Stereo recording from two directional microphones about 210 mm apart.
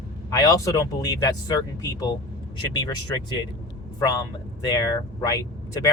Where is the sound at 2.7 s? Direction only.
20° left (ahead or behind).